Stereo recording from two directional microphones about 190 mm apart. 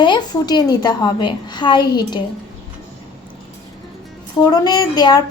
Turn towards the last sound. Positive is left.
turn(degrees=20)  # may be behind; listen again after turning